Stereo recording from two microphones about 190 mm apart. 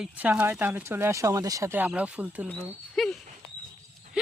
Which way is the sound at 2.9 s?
Centre (ahead or behind).